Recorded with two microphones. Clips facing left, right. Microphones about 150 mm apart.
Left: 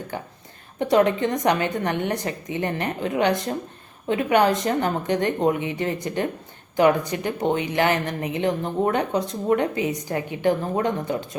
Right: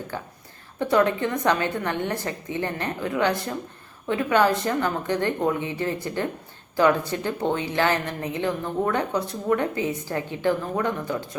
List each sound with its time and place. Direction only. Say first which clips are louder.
0.1 s a woman's voice: left 1 dB; 20° left (ahead or behind)